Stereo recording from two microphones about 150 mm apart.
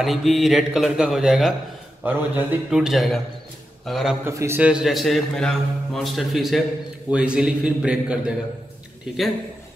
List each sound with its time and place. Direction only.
0.0 s a man's voice: centre (ahead or behind)
4.2 s a man's voice: 20° right (ahead or behind)
4.6 s a man's voice: 5° right (ahead or behind)